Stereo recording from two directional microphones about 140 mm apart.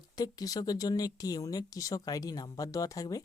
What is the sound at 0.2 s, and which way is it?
Speech, 25° left (ahead or behind).